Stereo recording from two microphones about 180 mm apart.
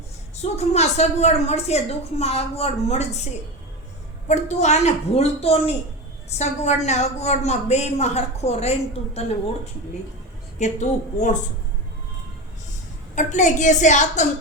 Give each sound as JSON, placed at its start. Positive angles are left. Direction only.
{"t": 0.3, "sound": "a woman's voice", "side_deg": 35}
{"t": 4.3, "sound": "a woman's voice", "side_deg": 40}
{"t": 10.6, "sound": "a woman's voice", "side_deg": 40}
{"t": 13.1, "sound": "a woman's voice", "side_deg": 45}